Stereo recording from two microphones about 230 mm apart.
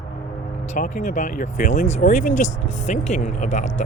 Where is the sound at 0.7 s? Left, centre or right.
Left.